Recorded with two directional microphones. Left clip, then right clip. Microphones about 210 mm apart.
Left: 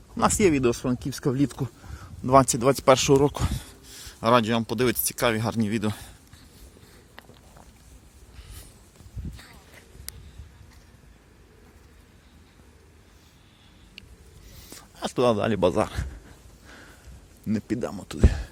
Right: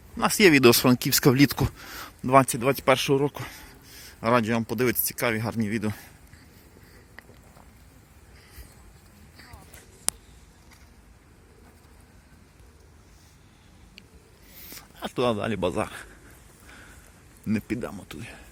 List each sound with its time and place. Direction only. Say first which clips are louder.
0.2 s speech: right 3 dB; 10° left (ahead or behind)
0.6 s speech: right 7 dB; 15° right (ahead or behind)
2.2 s speech: left 1 dB; 10° left (ahead or behind)
14.8 s speech: left 3 dB; 15° left (ahead or behind)
16.6 s a sound: left 1 dB; 15° left (ahead or behind)
17.4 s speech: left 1 dB; 5° left (ahead or behind)
17.7 s speech: left 6 dB; 15° left (ahead or behind)